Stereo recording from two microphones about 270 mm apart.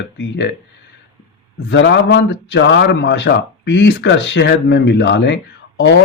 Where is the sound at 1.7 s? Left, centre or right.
Left.